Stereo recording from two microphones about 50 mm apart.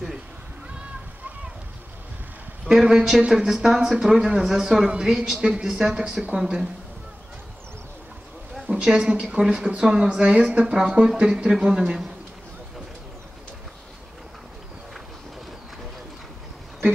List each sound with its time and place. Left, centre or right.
2.6 s speech: centre
4.8 s speech: centre
8.8 s speech: centre